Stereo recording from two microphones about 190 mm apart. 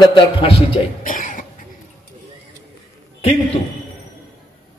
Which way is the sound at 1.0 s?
45° left (ahead or behind).